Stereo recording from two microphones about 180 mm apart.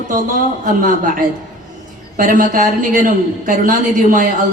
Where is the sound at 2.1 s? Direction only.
50° right (ahead or behind).